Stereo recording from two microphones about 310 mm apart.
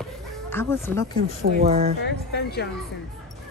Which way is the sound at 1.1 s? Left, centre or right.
Right.